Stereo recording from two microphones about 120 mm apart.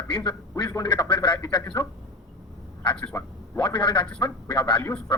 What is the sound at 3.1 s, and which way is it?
A man's voice, 40° left (ahead or behind).